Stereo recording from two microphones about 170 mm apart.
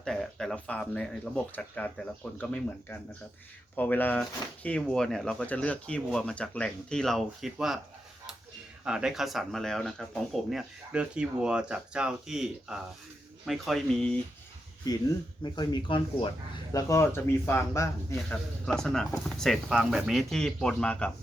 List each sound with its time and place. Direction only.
0.0 s speech: centre (ahead or behind)
8.8 s speech: 5° right (ahead or behind)
15.5 s speech: 25° left (ahead or behind)
16.7 s a man's voice: 15° left (ahead or behind)
18.6 s speech: 5° left (ahead or behind)